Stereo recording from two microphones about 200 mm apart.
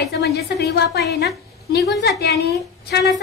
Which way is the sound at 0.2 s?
55° left (ahead or behind).